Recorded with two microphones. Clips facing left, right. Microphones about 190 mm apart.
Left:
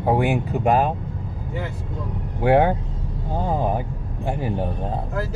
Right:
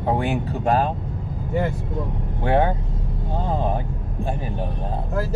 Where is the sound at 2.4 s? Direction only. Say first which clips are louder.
Left 3 dB; 15° left (ahead or behind).